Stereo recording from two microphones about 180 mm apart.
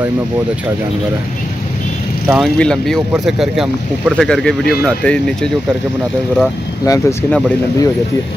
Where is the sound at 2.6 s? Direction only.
5° left (ahead or behind).